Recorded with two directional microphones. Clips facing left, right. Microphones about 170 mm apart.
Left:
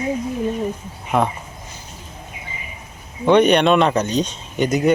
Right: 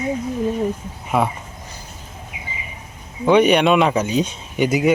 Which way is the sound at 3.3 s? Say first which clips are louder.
Even; 5° right (ahead or behind).